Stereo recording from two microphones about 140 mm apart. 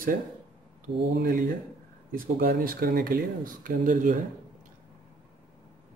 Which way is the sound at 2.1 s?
85° right.